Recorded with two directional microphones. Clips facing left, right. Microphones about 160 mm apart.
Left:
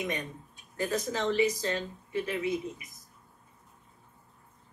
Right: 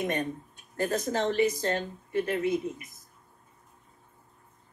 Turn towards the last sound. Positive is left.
turn(degrees=-50)  # may be behind; listen again after turning